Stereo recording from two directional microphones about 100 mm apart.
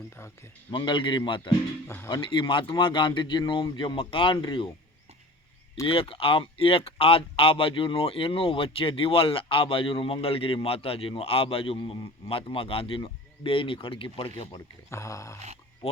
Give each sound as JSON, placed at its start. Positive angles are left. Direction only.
{"t": 0.7, "sound": "speech", "side_deg": 55}
{"t": 5.9, "sound": "speech", "side_deg": 65}
{"t": 14.8, "sound": "speech", "side_deg": 30}